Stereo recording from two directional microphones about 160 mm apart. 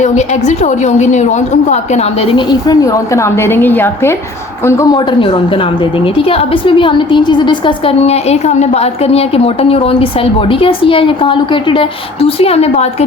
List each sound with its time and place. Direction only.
0.0 s a woman's voice: 45° left (ahead or behind)